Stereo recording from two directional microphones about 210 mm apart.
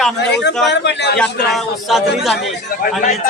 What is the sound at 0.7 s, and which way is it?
Speech, 55° left (ahead or behind).